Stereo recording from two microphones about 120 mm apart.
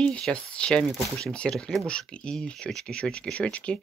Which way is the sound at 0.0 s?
10° left (ahead or behind).